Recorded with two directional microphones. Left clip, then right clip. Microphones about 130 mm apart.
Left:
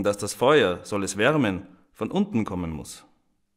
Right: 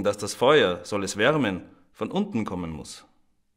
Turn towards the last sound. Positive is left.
turn(degrees=50)  # may be behind; listen again after turning